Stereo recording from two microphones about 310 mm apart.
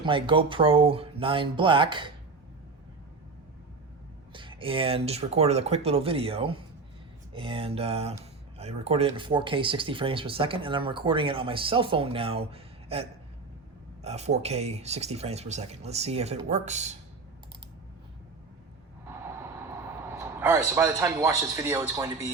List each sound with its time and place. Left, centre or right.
0.0 s speech: centre
4.3 s speech: centre
19.0 s a sound: centre